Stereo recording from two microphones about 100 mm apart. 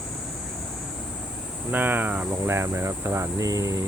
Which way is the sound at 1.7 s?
20° right (ahead or behind).